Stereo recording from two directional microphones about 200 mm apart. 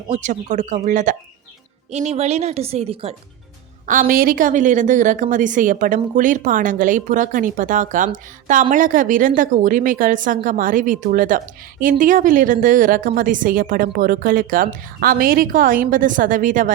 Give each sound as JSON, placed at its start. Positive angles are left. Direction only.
{"t": 0.1, "sound": "a woman's voice", "side_deg": -35}
{"t": 3.8, "sound": "a woman's voice", "side_deg": -45}